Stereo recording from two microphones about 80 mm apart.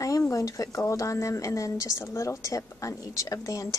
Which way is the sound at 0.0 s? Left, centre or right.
Left.